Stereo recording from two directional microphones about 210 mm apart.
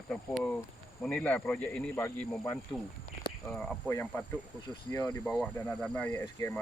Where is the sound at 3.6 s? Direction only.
10° left (ahead or behind).